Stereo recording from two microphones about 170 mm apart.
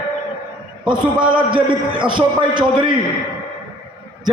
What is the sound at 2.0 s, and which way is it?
Speech, 30° right (ahead or behind).